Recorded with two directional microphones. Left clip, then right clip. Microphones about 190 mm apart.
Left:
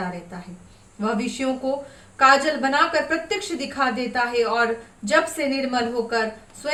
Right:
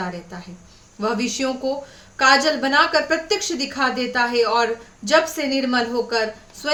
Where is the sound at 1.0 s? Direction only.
25° right (ahead or behind).